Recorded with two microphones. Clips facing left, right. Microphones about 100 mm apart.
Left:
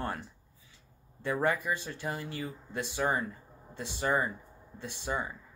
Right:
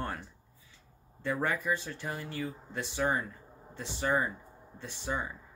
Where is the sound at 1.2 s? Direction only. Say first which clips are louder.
Left 2 dB; 15° left (ahead or behind).